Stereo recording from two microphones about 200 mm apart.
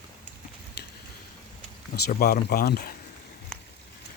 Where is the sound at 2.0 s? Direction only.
50° left (ahead or behind).